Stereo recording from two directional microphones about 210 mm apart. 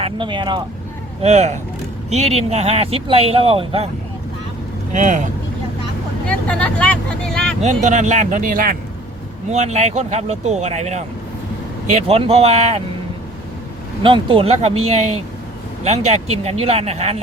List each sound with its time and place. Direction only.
0.0 s speech: 25° right (ahead or behind)
1.2 s speech: 35° right (ahead or behind)
4.9 s speech: 35° right (ahead or behind)
6.2 s speech: 5° left (ahead or behind)
7.6 s speech: 35° right (ahead or behind)
14.0 s speech: 25° right (ahead or behind)